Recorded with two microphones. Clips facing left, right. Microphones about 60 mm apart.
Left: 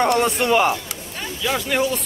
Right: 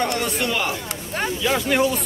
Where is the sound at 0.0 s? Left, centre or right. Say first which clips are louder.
Left 5 dB; left.